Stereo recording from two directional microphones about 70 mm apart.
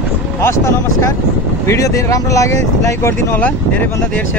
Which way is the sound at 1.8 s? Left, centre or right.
Left.